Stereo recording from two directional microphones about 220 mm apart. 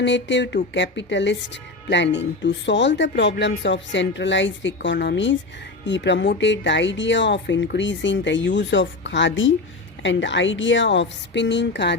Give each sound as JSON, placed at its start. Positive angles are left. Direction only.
{"t": 0.0, "sound": "a woman's voice", "side_deg": 55}